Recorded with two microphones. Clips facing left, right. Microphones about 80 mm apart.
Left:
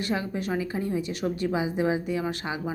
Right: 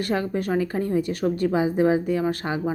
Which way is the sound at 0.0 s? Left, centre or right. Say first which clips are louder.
Right 4 dB; right.